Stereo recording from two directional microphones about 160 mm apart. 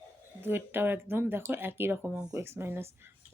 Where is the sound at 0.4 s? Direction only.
15° right (ahead or behind).